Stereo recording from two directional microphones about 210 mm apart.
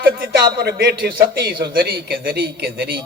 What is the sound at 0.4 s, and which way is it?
A man's voice, 45° right (ahead or behind).